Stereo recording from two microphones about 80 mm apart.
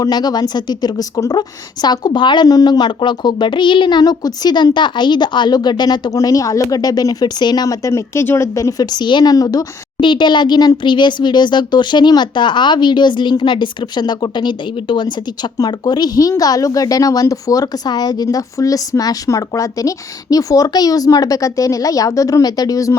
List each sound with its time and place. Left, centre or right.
0.0 s a woman's voice: left
2.5 s speech: left
6.1 s a woman's voice: left
8.8 s a woman's voice: left
9.3 s a woman's voice: left
10.0 s speech: left
15.5 s a woman's voice: left